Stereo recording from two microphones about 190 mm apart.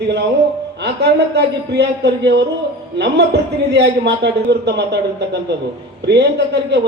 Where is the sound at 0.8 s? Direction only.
60° right (ahead or behind).